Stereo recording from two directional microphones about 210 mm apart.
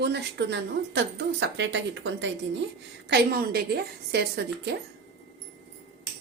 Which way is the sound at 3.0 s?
50° right (ahead or behind).